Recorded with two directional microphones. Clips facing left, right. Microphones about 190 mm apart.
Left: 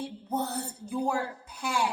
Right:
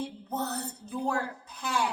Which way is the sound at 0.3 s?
10° left (ahead or behind).